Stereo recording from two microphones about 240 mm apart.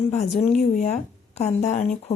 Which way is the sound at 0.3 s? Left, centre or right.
Left.